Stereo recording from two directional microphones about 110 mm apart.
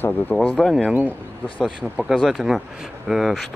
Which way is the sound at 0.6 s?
5° left (ahead or behind).